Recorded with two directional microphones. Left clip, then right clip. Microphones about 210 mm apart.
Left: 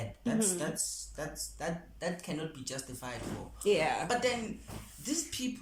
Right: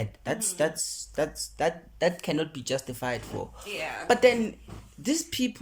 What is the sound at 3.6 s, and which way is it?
Speech, 25° left (ahead or behind).